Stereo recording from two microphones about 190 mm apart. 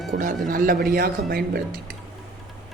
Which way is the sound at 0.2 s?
45° right (ahead or behind).